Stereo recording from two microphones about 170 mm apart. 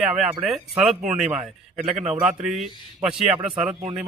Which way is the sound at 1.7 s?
45° right (ahead or behind).